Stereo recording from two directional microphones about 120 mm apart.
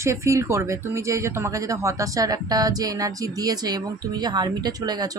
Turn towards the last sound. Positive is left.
turn(degrees=-35)  # may be behind; listen again after turning